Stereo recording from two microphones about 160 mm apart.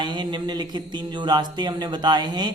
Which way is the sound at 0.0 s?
30° right (ahead or behind).